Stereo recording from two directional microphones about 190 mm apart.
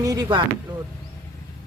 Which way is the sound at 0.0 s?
20° right (ahead or behind).